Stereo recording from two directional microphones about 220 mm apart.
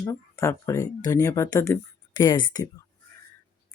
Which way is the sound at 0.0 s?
15° left (ahead or behind).